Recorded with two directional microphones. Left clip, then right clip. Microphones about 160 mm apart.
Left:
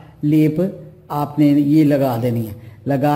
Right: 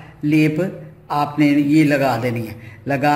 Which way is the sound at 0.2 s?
35° left (ahead or behind).